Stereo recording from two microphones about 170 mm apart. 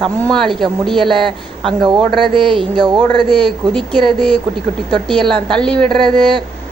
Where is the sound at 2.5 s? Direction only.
25° right (ahead or behind).